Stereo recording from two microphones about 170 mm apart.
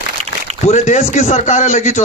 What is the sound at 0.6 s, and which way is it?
A man's voice, 45° left (ahead or behind).